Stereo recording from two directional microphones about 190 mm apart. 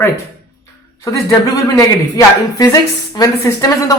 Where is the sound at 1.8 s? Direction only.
15° left (ahead or behind).